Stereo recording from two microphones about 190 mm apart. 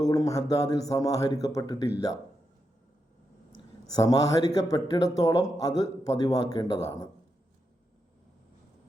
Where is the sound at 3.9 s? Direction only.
20° left (ahead or behind).